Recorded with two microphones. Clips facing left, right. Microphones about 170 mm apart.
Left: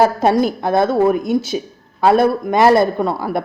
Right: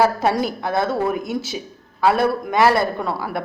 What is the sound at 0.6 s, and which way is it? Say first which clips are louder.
A woman's voice: left 7 dB; 20° left (ahead or behind).